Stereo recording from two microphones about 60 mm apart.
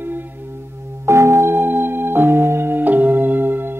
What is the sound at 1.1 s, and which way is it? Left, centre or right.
Music, right.